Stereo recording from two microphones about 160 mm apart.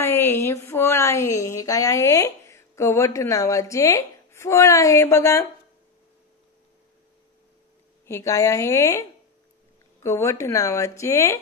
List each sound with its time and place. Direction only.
0.0 s speech: 15° left (ahead or behind)
8.1 s speech: 20° left (ahead or behind)
10.0 s speech: 15° left (ahead or behind)